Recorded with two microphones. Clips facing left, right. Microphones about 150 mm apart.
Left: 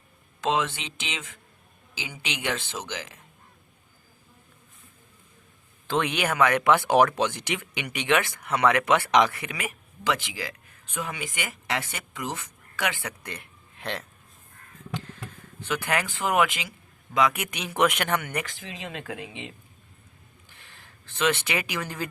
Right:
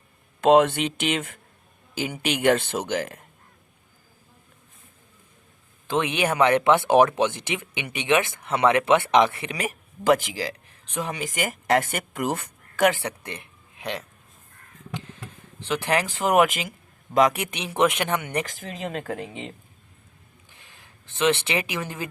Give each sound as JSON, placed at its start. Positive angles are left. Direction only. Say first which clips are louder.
{"t": 0.4, "sound": "speech", "louder": "right 10 dB", "side_deg": -55}
{"t": 5.9, "sound": "speech", "louder": "right 2 dB", "side_deg": -20}
{"t": 13.0, "sound": "speech", "louder": "right 4 dB", "side_deg": -30}
{"t": 15.6, "sound": "speech", "louder": "right 3 dB", "side_deg": -30}
{"t": 18.3, "sound": "speech", "louder": "right 4 dB", "side_deg": -35}
{"t": 20.5, "sound": "speech", "louder": "even", "side_deg": -15}